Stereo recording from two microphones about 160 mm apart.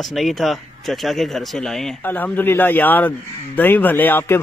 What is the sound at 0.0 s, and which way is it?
Speech, centre (ahead or behind).